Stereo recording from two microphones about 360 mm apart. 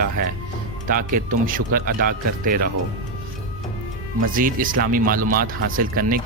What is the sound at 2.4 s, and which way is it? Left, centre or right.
Speech, right.